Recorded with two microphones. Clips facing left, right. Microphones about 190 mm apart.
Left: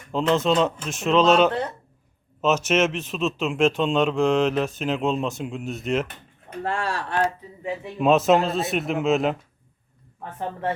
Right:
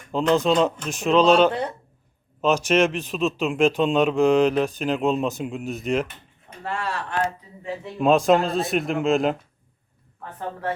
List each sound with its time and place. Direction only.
0.1 s speech: centre (ahead or behind)
1.5 s speech: 10° right (ahead or behind)
2.4 s speech: 5° left (ahead or behind)
6.6 s speech: 40° left (ahead or behind)
7.9 s speech: 5° left (ahead or behind)